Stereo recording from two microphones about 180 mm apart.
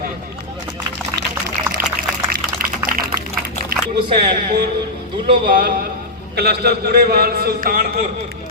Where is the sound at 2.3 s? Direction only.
55° right (ahead or behind).